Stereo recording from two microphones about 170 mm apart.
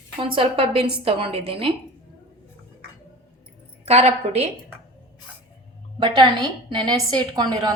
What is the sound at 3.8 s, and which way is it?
Speech, 40° right (ahead or behind).